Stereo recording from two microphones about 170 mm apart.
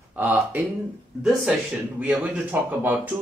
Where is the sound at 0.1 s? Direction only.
10° right (ahead or behind).